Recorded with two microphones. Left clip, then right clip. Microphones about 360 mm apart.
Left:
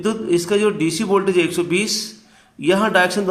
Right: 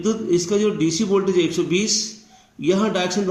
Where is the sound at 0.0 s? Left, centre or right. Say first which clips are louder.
Left 1 dB; left.